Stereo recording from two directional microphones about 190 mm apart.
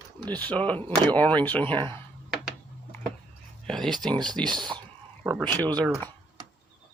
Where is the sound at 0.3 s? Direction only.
10° left (ahead or behind).